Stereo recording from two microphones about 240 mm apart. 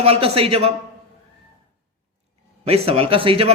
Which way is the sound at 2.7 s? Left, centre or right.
Right.